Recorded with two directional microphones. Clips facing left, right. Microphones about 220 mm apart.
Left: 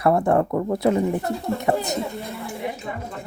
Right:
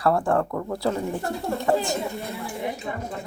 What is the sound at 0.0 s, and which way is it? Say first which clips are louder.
Speech: left 3 dB; 20° left (ahead or behind).